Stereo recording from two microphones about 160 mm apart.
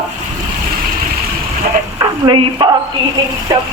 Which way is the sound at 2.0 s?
30° right (ahead or behind).